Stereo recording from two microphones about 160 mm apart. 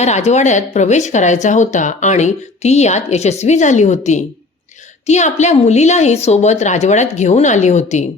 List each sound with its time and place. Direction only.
0.0 s speech: 45° left (ahead or behind)